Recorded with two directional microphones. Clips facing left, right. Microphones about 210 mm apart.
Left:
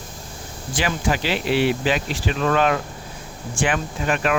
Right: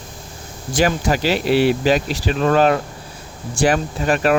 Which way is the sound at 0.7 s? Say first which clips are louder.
Right 5 dB; 40° right (ahead or behind).